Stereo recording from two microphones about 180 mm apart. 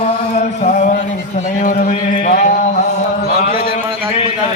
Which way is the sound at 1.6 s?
50° left (ahead or behind).